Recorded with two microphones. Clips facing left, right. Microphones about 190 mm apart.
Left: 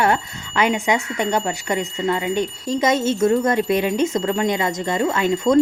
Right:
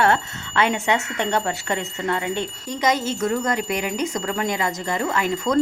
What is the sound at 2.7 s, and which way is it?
Speech, 25° left (ahead or behind).